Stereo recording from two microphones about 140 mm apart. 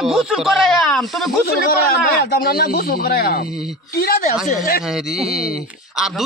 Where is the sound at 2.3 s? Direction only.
90° left.